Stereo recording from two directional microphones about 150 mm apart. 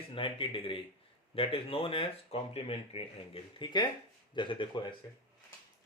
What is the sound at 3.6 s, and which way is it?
Speech, 30° left (ahead or behind).